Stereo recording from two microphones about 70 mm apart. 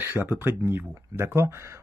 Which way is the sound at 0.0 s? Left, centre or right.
Right.